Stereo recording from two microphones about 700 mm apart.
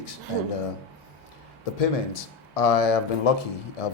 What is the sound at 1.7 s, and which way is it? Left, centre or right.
Speech, left.